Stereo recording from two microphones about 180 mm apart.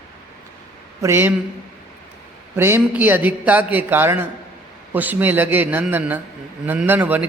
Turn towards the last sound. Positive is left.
turn(degrees=-10)  # may be behind; listen again after turning